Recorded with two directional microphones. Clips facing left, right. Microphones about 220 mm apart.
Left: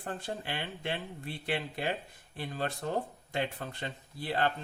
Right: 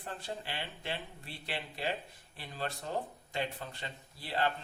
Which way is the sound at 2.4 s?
50° left (ahead or behind).